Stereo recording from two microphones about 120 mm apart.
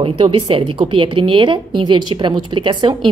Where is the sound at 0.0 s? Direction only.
45° right (ahead or behind).